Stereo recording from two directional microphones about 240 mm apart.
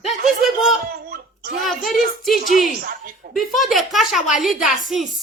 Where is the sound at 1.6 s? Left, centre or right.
Centre.